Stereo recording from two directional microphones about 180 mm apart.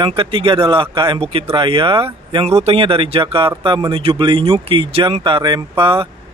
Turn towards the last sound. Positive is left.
turn(degrees=-25)  # may be behind; listen again after turning